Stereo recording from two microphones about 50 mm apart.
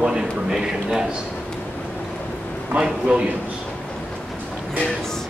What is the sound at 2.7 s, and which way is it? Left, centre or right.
Speech, right.